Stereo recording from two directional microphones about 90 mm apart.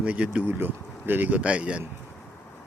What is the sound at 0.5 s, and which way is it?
Speech, 20° right (ahead or behind).